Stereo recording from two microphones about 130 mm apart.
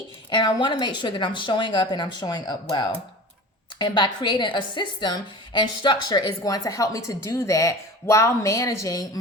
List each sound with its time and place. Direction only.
0.3 s a woman's voice: 35° left (ahead or behind)